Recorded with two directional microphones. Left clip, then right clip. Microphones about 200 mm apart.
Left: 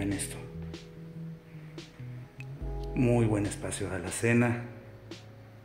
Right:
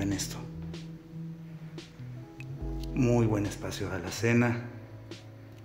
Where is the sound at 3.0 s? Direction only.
Centre (ahead or behind).